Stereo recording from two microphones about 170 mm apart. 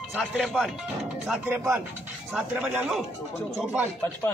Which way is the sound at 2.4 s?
10° right (ahead or behind).